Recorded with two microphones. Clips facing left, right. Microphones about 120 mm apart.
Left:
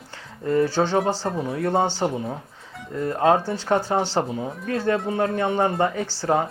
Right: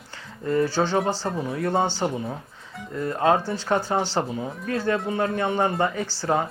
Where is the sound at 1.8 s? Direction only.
25° left (ahead or behind).